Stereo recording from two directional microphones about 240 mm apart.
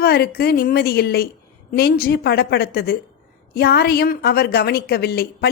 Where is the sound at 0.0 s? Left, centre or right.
Left.